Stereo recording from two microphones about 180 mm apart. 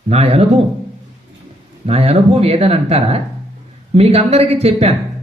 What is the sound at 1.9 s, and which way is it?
Speech, 35° right (ahead or behind).